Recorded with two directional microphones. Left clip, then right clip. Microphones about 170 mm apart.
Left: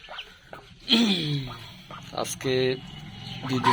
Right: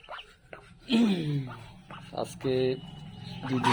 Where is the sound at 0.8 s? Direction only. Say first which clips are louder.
Left 5 dB; 20° right (ahead or behind).